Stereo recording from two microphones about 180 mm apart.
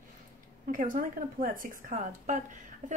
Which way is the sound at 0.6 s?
50° right (ahead or behind).